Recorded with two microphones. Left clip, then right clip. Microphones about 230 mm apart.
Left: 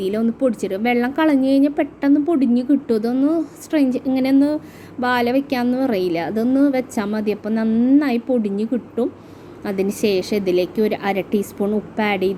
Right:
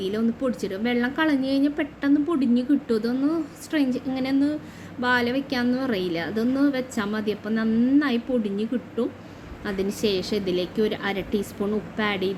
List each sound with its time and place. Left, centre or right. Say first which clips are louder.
0.0 s a woman's voice: left 6 dB; centre